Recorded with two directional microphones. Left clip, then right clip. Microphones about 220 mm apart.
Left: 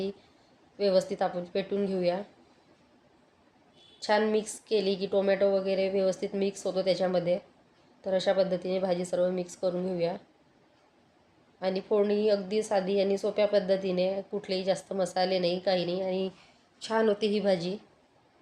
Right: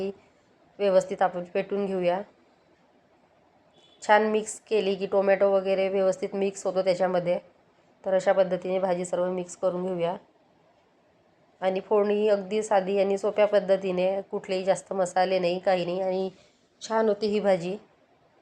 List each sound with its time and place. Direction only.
0.9 s a woman's voice: 10° left (ahead or behind)
4.0 s a woman's voice: 10° left (ahead or behind)
6.5 s a woman's voice: 5° right (ahead or behind)
6.7 s a woman's voice: 10° left (ahead or behind)
11.9 s a woman's voice: centre (ahead or behind)
16.8 s speech: 5° right (ahead or behind)
17.2 s a woman's voice: 10° left (ahead or behind)